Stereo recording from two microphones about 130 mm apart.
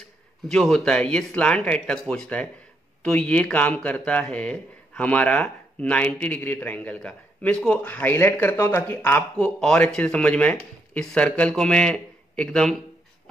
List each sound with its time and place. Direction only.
0.5 s a man's voice: 5° left (ahead or behind)